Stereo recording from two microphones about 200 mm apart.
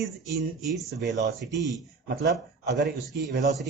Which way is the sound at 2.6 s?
60° right (ahead or behind).